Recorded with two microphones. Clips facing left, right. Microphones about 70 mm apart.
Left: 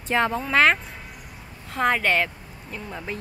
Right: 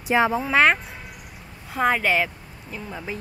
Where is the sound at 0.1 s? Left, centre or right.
Centre.